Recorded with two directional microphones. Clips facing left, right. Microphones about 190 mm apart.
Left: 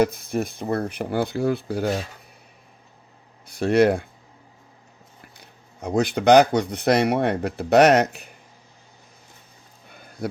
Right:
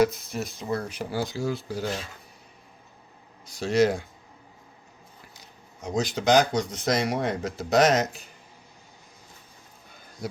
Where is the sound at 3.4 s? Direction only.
60° left (ahead or behind).